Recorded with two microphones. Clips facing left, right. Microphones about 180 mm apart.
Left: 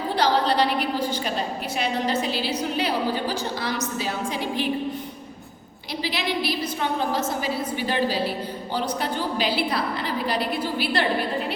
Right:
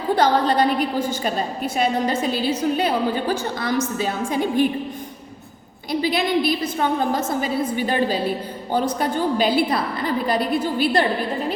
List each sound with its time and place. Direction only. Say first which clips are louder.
0.2 s a woman's voice: right 2 dB; 50° right (ahead or behind)
5.9 s a woman's voice: right 7 dB; 50° right (ahead or behind)